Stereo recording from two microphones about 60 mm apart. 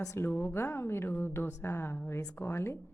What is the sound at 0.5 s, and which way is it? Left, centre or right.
A woman's voice, left.